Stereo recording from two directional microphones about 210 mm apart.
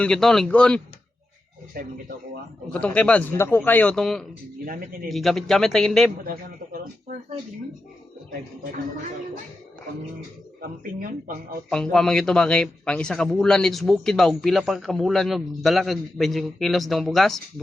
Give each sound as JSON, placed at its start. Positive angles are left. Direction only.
{"t": 0.0, "sound": "a man's voice", "side_deg": 0}
{"t": 1.7, "sound": "speech", "side_deg": -45}
{"t": 2.8, "sound": "a man's voice", "side_deg": 5}
{"t": 4.6, "sound": "speech", "side_deg": -45}
{"t": 5.0, "sound": "a man's voice", "side_deg": 0}
{"t": 11.7, "sound": "a man's voice", "side_deg": 5}